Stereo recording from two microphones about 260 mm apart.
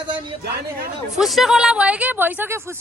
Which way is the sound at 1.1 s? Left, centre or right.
Centre.